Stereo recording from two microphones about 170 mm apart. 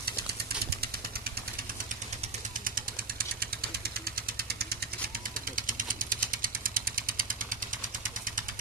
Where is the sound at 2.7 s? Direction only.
55° right (ahead or behind).